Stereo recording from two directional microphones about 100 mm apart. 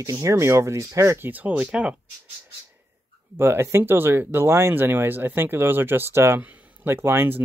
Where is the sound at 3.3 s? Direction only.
25° right (ahead or behind).